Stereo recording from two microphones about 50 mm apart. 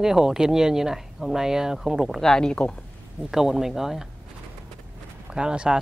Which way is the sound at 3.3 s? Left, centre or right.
Centre.